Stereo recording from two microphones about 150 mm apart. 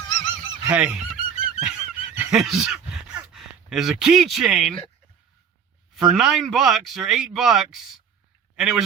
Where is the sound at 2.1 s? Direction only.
5° right (ahead or behind).